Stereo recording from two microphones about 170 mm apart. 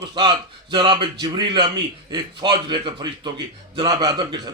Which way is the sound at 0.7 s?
30° right (ahead or behind).